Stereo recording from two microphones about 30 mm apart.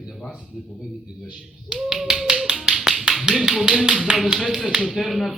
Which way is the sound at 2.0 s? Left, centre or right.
Centre.